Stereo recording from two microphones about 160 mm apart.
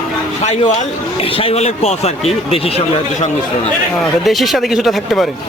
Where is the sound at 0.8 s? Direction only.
35° left (ahead or behind).